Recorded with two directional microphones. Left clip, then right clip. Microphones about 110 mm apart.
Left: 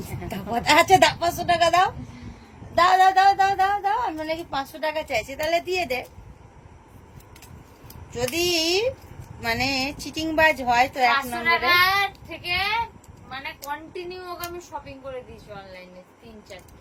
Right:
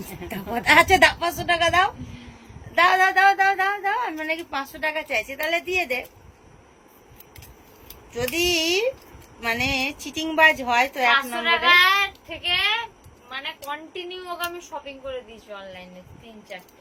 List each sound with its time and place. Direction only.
0.5 s a woman's voice: 30° left (ahead or behind)
8.1 s a woman's voice: 25° left (ahead or behind)
11.3 s a woman's voice: centre (ahead or behind)